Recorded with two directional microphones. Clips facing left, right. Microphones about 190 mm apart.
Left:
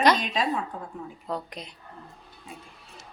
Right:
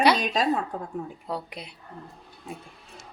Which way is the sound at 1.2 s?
10° right (ahead or behind).